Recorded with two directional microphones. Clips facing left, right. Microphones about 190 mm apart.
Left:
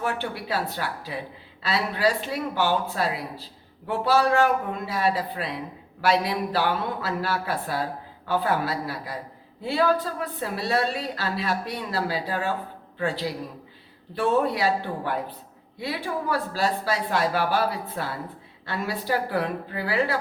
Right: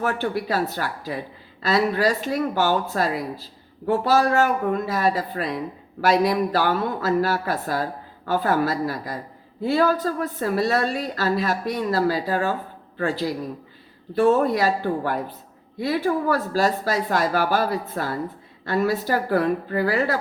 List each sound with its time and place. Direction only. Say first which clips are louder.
0.0 s a woman's voice: right 5 dB; 45° right (ahead or behind)